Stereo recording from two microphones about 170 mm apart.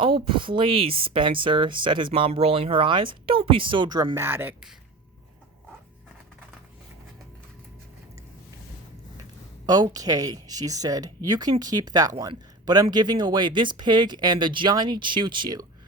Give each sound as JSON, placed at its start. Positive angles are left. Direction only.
{"t": 0.0, "sound": "speech", "side_deg": -30}
{"t": 9.6, "sound": "speech", "side_deg": -25}